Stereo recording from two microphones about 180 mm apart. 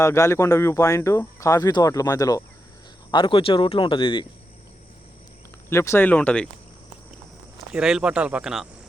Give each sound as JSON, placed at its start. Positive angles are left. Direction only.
{"t": 0.0, "sound": "speech", "side_deg": 15}
{"t": 5.6, "sound": "speech", "side_deg": 15}
{"t": 7.7, "sound": "speech", "side_deg": -5}